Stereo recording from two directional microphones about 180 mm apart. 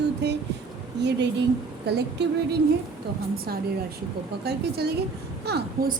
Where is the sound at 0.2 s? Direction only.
70° right (ahead or behind).